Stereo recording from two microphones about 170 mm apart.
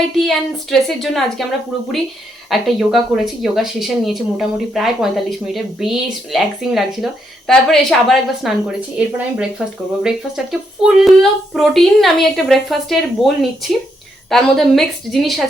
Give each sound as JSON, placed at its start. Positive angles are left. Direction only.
{"t": 0.2, "sound": "speech", "side_deg": 0}
{"t": 2.5, "sound": "speech", "side_deg": 0}